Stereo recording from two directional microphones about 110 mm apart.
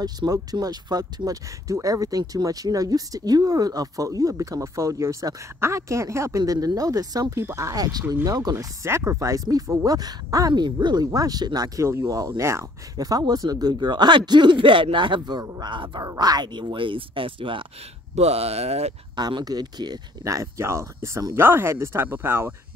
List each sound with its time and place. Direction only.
0.0 s speech: 35° right (ahead or behind)
12.9 s speech: 35° right (ahead or behind); by 17.6 s 50° right (ahead or behind)
18.1 s speech: 70° right (ahead or behind)
19.1 s speech: 40° right (ahead or behind); by 22.5 s 20° right (ahead or behind)